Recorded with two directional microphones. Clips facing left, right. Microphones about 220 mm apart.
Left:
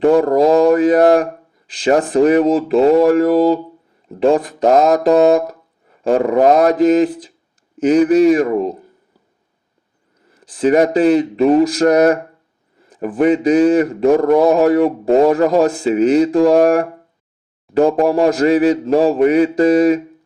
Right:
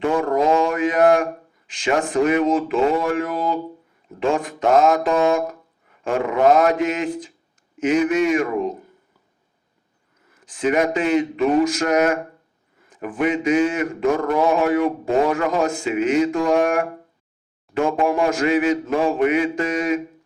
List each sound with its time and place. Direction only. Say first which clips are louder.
0.0 s a man's voice: left 8 dB; 35° left (ahead or behind)
10.2 s a man's voice: left 6 dB; 35° left (ahead or behind)